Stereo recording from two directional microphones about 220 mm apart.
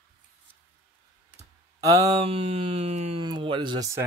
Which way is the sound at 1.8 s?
15° right (ahead or behind).